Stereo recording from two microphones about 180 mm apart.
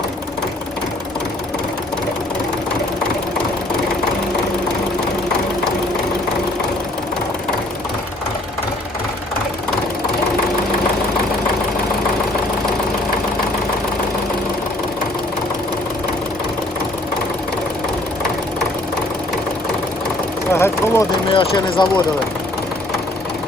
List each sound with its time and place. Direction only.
20.5 s vehicle: 15° left (ahead or behind)
21.3 s speech: 25° left (ahead or behind)